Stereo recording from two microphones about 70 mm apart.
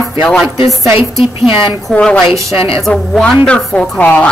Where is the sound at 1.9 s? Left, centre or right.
Centre.